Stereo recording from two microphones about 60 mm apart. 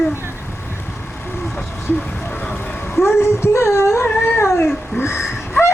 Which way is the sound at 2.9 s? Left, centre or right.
Left.